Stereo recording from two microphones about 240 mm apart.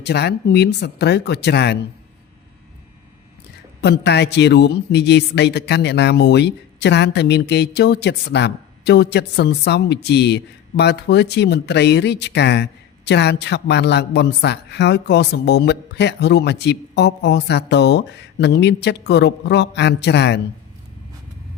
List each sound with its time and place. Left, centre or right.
0.0 s a man's voice: left
3.8 s a man's voice: left